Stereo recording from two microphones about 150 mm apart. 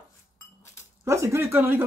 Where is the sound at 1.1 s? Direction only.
20° right (ahead or behind).